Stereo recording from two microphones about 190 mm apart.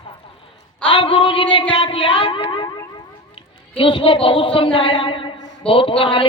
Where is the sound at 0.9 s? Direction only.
25° left (ahead or behind).